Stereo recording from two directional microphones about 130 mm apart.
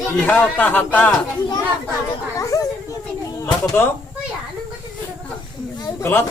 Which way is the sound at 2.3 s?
25° left (ahead or behind).